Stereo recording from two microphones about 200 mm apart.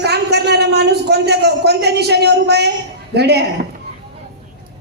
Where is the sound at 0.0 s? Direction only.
55° right (ahead or behind).